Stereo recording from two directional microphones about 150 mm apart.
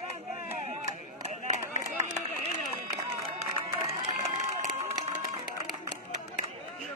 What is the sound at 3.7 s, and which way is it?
Crowd, 45° right (ahead or behind).